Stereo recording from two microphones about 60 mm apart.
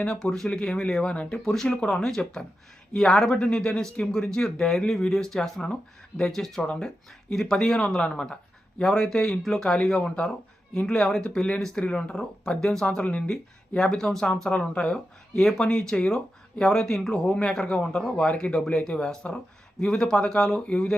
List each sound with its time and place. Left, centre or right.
0.0 s speech: centre
1.4 s speech: centre
13.2 s speech: centre